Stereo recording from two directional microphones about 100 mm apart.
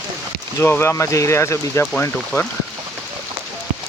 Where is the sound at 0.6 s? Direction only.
25° left (ahead or behind).